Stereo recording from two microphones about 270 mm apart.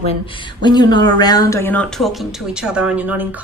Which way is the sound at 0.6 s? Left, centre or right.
Centre.